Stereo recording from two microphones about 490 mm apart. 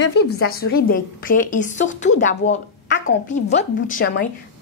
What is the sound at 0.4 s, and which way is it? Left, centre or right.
A woman's voice, centre.